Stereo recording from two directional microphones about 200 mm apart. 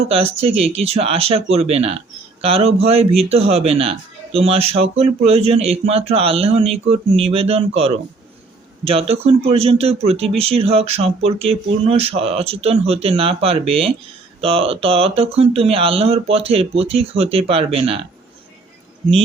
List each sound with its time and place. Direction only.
0.0 s a man's voice: 30° right (ahead or behind)